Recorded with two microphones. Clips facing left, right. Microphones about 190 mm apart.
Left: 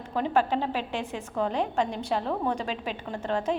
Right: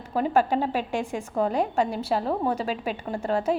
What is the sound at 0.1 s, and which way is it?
A woman's voice, 10° right (ahead or behind).